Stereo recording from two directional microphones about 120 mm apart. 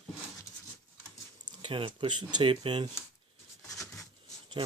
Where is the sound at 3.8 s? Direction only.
25° left (ahead or behind).